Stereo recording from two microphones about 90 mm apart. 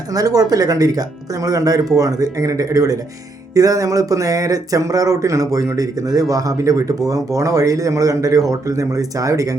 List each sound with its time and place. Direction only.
0.1 s speech: 45° right (ahead or behind)